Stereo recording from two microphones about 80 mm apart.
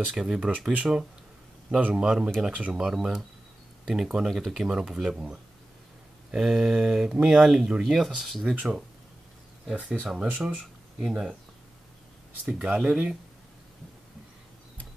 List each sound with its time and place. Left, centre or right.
0.0 s speech: centre
2.4 s speech: centre
2.7 s speech: centre
6.3 s speech: centre
9.7 s speech: centre
12.6 s speech: centre